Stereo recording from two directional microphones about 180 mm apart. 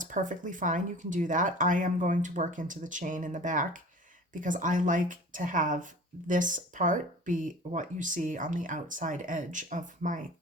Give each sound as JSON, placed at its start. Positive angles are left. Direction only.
{"t": 0.0, "sound": "speech", "side_deg": -45}